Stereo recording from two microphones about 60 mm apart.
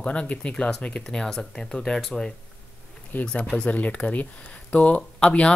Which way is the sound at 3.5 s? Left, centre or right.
Left.